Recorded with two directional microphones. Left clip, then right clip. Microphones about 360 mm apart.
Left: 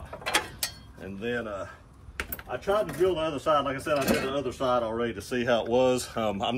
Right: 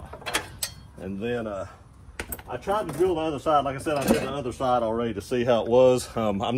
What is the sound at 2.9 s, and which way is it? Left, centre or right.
Speech, centre.